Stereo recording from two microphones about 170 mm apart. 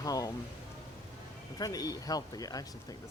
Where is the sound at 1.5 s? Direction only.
20° left (ahead or behind).